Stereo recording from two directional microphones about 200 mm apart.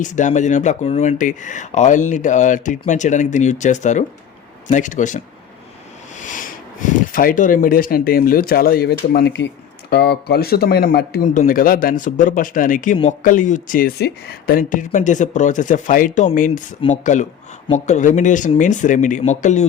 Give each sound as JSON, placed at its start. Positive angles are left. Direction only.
{"t": 0.0, "sound": "speech", "side_deg": 40}